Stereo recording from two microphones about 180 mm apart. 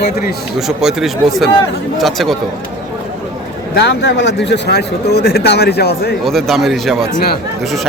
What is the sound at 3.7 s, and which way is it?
Speech, 70° left (ahead or behind).